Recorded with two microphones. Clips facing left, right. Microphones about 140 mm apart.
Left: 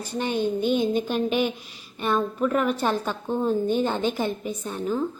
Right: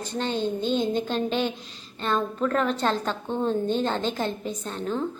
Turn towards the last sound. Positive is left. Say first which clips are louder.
# left 2 dB
turn(degrees=5)  # may be behind; listen again after turning